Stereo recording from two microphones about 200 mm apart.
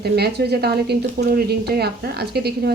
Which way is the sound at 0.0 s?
55° right (ahead or behind).